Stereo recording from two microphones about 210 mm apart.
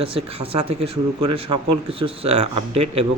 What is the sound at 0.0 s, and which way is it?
A man's voice, 25° right (ahead or behind).